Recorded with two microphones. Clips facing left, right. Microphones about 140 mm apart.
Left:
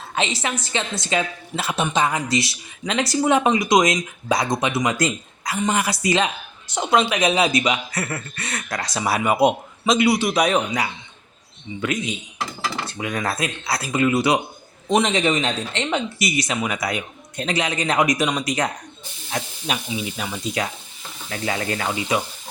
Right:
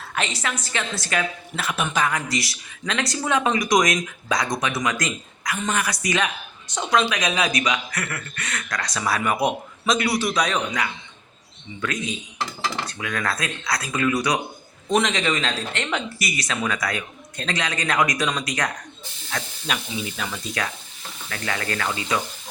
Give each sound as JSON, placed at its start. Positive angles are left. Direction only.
{"t": 0.4, "sound": "speech", "side_deg": 25}
{"t": 10.1, "sound": "a man's voice", "side_deg": 0}
{"t": 10.3, "sound": "speech", "side_deg": 25}